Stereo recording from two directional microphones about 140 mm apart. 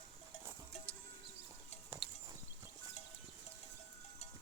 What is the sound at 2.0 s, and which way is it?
Clip-clop, 35° right (ahead or behind).